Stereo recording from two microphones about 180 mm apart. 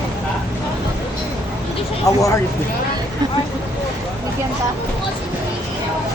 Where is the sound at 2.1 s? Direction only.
20° left (ahead or behind).